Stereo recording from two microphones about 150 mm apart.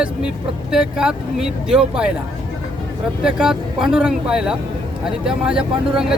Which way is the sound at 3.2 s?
5° right (ahead or behind).